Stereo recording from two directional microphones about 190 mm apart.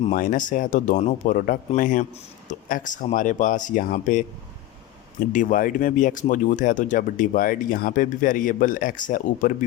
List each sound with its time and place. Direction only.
0.0 s speech: 45° left (ahead or behind)
5.3 s speech: 45° left (ahead or behind)